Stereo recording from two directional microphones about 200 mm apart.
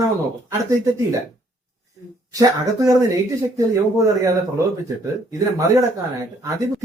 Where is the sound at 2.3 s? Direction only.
15° right (ahead or behind).